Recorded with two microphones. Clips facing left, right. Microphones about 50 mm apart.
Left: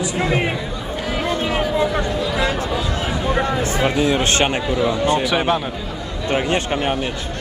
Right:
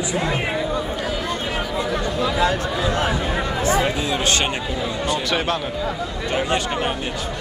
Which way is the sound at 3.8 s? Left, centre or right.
Left.